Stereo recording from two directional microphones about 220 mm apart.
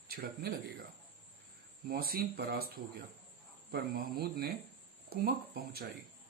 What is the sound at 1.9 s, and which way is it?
Speech, 45° right (ahead or behind).